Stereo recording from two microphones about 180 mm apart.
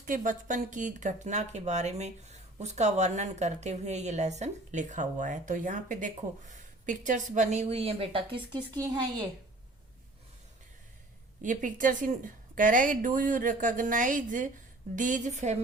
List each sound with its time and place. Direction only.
0.0 s a woman's voice: 45° right (ahead or behind); by 8.9 s 25° right (ahead or behind)
11.4 s a woman's voice: 45° right (ahead or behind)